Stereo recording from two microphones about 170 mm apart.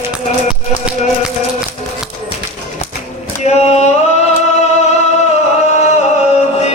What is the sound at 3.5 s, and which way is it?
Singing, 40° left (ahead or behind).